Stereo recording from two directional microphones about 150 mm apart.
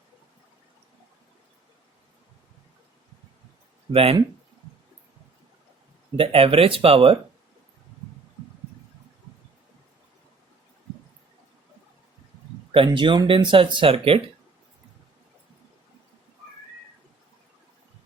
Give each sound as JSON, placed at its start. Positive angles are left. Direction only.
{"t": 3.9, "sound": "speech", "side_deg": -40}
{"t": 6.1, "sound": "speech", "side_deg": -40}
{"t": 12.7, "sound": "speech", "side_deg": -35}